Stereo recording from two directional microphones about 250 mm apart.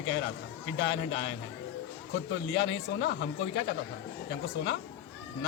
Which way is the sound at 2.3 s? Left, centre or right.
Left.